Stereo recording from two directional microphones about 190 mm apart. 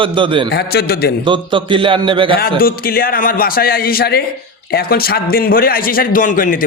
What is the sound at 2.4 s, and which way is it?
A man's voice, 50° left (ahead or behind).